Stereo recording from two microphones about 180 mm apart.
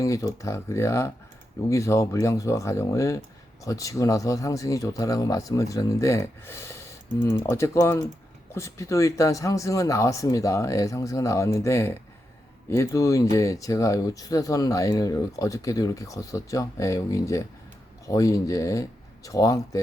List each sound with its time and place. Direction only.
0.0 s speech: 20° left (ahead or behind)